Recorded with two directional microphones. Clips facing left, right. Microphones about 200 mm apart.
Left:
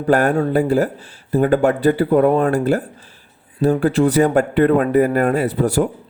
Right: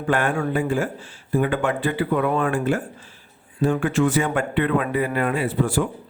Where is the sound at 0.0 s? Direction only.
40° left (ahead or behind).